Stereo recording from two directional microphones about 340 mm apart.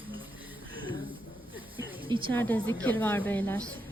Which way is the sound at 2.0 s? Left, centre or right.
Centre.